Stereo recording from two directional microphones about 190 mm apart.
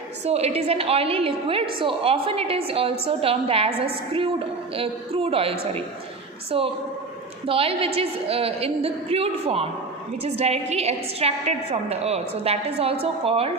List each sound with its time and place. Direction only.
0.3 s a woman's voice: 35° right (ahead or behind)